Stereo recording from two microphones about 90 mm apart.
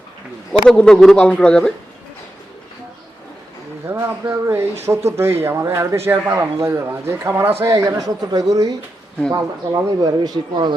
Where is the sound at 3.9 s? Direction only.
30° right (ahead or behind).